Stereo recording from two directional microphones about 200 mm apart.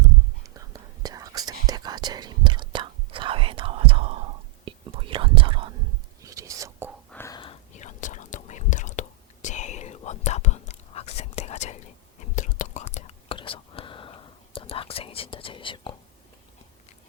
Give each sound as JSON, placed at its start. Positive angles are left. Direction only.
{"t": 0.4, "sound": "whispering", "side_deg": -15}
{"t": 7.1, "sound": "whispering", "side_deg": 10}
{"t": 7.7, "sound": "whispering", "side_deg": 35}